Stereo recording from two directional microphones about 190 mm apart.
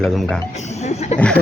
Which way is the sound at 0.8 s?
35° left (ahead or behind).